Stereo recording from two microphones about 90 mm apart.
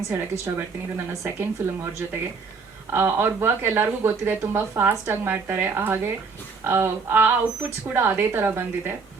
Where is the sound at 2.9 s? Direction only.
25° right (ahead or behind).